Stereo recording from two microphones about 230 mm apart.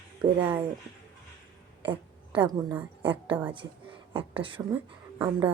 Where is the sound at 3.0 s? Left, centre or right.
Right.